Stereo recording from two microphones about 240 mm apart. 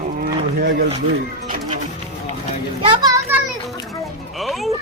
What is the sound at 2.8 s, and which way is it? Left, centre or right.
Children playing, centre.